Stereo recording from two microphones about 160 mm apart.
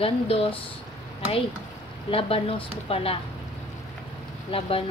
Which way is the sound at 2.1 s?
35° left (ahead or behind).